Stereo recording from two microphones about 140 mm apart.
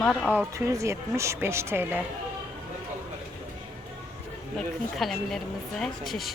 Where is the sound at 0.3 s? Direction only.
20° right (ahead or behind).